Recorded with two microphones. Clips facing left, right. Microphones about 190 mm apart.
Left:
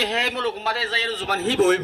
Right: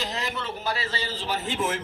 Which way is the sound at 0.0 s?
70° left (ahead or behind).